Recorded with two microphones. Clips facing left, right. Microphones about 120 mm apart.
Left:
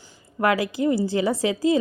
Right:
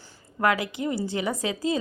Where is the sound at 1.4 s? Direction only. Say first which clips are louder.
Left 7 dB; 30° right (ahead or behind).